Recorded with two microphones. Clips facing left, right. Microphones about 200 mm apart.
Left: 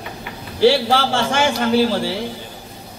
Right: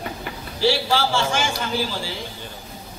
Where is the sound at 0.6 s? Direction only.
60° left (ahead or behind).